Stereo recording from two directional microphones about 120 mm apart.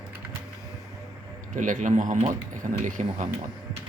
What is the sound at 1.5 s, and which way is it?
Speech, 90° right.